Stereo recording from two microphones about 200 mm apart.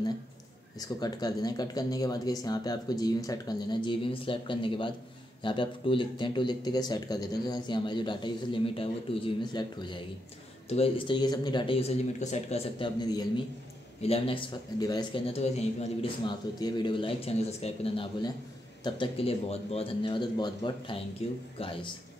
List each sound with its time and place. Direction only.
0.7 s speech: 20° left (ahead or behind)